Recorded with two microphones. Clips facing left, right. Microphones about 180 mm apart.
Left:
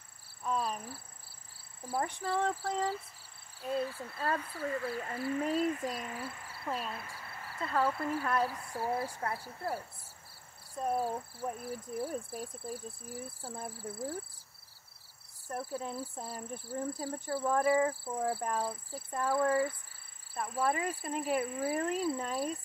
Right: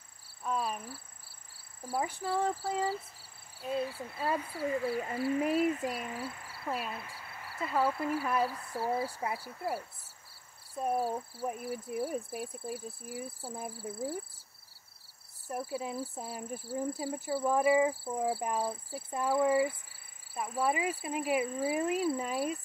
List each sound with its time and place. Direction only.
0.4 s cricket: 5° right (ahead or behind)
1.9 s speech: 5° right (ahead or behind)
15.4 s speech: 10° right (ahead or behind)